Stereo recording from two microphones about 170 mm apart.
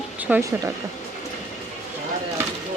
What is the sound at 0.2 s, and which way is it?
Speech, 10° right (ahead or behind).